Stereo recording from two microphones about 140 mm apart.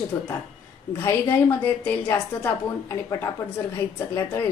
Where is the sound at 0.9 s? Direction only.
15° left (ahead or behind).